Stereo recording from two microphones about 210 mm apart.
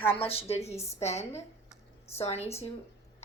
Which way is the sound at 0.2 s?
30° left (ahead or behind).